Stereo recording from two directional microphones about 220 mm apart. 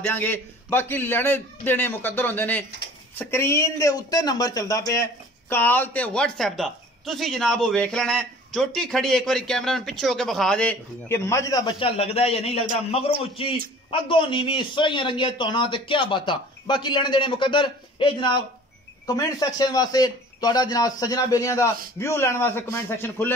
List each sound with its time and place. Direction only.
0.1 s a man's voice: 10° left (ahead or behind)